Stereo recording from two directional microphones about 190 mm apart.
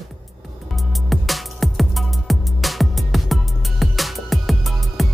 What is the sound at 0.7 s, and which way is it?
Music, centre (ahead or behind).